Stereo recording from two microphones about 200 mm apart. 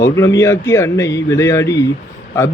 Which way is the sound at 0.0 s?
15° left (ahead or behind).